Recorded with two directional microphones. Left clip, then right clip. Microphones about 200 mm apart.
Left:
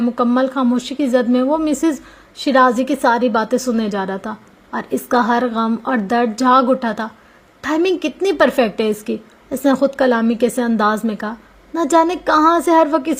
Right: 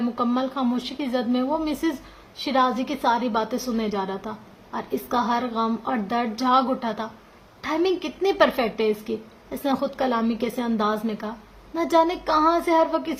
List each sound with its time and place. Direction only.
0.2 s a woman's voice: 35° left (ahead or behind)